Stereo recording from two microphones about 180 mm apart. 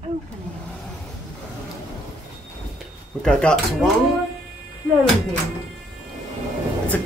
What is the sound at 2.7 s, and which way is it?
Speech, 5° left (ahead or behind).